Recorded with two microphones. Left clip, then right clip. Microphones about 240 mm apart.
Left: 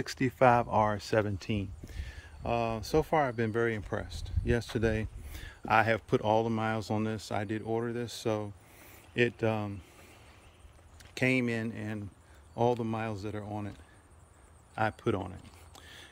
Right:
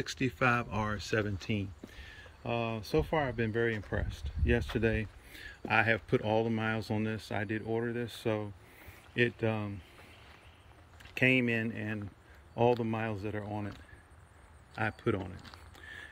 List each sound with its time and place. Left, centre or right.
0.0 s speech: centre
11.1 s speech: centre
14.8 s speech: centre
15.8 s a sound: centre